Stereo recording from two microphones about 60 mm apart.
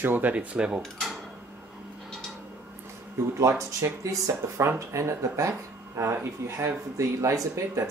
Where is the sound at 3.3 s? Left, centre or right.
Right.